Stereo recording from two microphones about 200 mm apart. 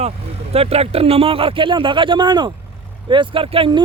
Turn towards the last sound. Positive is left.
turn(degrees=-25)  # may be behind; listen again after turning